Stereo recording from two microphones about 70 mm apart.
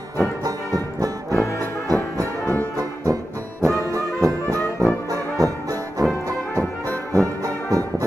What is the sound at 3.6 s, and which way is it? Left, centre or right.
Music, right.